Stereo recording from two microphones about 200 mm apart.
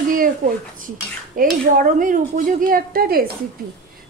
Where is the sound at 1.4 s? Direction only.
45° right (ahead or behind).